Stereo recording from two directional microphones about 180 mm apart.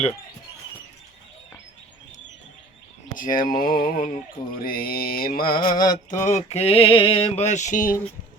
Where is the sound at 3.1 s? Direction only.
50° left (ahead or behind).